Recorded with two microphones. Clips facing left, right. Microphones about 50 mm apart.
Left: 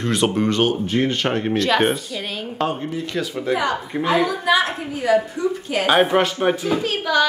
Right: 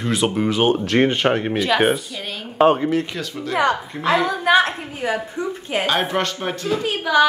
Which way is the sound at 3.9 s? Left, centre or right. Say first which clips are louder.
Even; centre.